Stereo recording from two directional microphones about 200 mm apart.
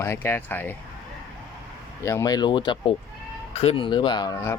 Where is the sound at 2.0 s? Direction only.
15° left (ahead or behind).